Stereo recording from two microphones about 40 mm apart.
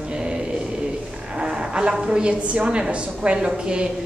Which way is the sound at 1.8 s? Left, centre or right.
Right.